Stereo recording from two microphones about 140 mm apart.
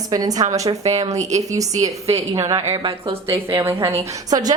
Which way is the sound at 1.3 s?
25° right (ahead or behind).